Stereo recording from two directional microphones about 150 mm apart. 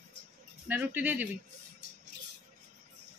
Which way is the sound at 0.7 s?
10° right (ahead or behind).